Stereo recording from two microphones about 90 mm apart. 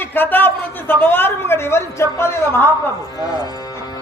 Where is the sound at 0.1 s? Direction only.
20° left (ahead or behind).